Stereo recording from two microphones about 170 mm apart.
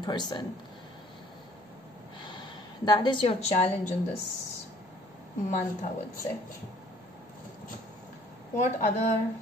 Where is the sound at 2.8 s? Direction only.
25° left (ahead or behind).